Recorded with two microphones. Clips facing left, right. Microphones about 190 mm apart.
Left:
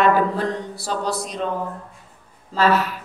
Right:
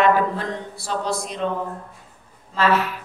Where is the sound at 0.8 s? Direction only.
35° left (ahead or behind).